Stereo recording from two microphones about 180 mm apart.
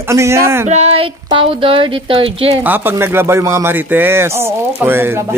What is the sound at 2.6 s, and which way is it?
Speech, 10° right (ahead or behind).